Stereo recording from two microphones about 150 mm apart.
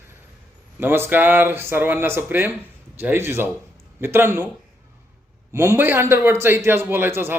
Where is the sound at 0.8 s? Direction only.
15° right (ahead or behind).